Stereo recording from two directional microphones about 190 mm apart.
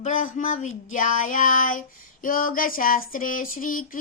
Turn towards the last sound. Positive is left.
turn(degrees=45)  # may be behind; listen again after turning